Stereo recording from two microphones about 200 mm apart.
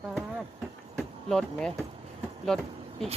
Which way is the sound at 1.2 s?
5° left (ahead or behind).